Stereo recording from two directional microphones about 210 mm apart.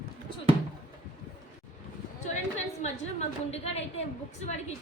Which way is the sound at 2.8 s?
35° left (ahead or behind).